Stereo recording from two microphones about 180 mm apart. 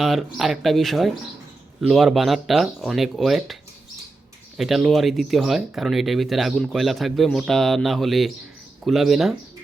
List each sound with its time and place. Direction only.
0.0 s speech: centre (ahead or behind)